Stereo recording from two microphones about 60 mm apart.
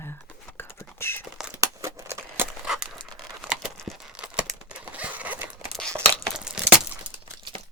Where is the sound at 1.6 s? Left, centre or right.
Right.